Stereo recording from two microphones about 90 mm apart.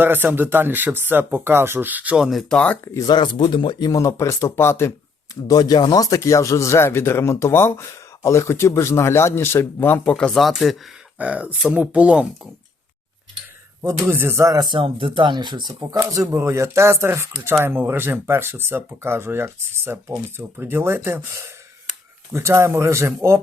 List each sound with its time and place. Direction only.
0.0 s speech: 20° right (ahead or behind)
2.1 s speech: 5° right (ahead or behind)
2.8 s speech: 30° left (ahead or behind)
3.1 s speech: 55° left (ahead or behind)
3.9 s speech: 35° left (ahead or behind)
5.3 s speech: 45° left (ahead or behind); by 10.0 s 25° left (ahead or behind)
10.0 s speech: 10° left (ahead or behind)
11.2 s speech: 15° right (ahead or behind)
14.0 s speech: 25° right (ahead or behind)
14.4 s speech: 40° right (ahead or behind)
14.7 s speech: 75° right (ahead or behind); by 16.0 s 55° right (ahead or behind)
16.0 s speech: 35° right (ahead or behind)